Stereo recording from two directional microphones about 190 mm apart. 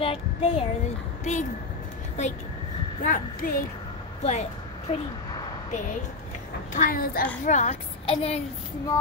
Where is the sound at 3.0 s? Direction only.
45° left (ahead or behind).